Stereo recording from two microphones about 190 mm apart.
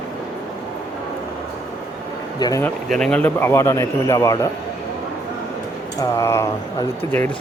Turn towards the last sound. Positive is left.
turn(degrees=15)  # may be behind; listen again after turning